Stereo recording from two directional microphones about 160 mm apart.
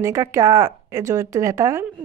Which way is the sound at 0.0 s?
15° right (ahead or behind).